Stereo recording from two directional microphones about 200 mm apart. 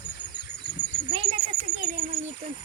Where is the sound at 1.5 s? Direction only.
35° right (ahead or behind).